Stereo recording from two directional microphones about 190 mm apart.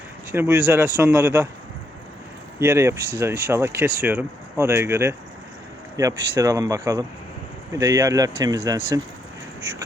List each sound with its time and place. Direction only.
0.3 s speech: 10° right (ahead or behind)
2.6 s speech: 15° right (ahead or behind)